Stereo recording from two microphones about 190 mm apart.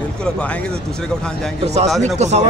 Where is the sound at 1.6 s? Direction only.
35° right (ahead or behind).